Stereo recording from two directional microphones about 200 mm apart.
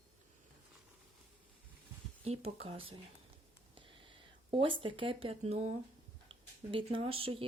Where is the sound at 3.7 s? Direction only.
25° right (ahead or behind).